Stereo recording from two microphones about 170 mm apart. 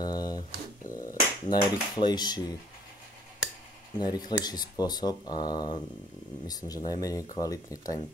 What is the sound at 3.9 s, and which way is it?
Speech, 25° left (ahead or behind).